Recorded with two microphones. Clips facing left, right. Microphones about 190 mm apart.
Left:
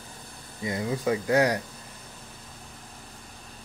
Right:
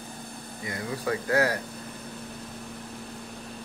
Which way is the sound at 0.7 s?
20° left (ahead or behind).